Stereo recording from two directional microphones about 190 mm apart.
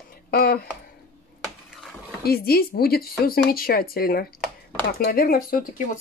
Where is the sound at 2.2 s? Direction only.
55° left (ahead or behind).